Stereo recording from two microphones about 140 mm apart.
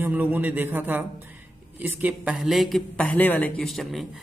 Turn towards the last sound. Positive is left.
turn(degrees=0)  # may be behind; listen again after turning